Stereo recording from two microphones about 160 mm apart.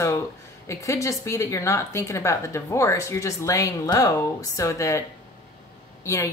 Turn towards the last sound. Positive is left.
turn(degrees=20)  # may be behind; listen again after turning